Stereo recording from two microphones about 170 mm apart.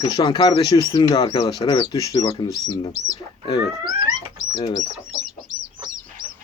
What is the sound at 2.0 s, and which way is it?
Speech, 20° left (ahead or behind).